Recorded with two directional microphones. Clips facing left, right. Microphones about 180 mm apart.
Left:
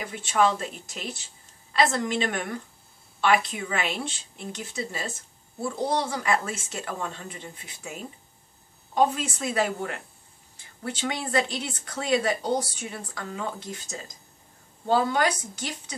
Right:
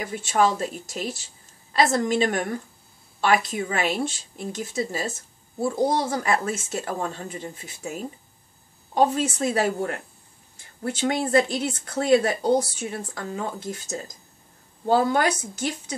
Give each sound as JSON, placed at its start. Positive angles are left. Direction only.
{"t": 0.3, "sound": "speech", "side_deg": -40}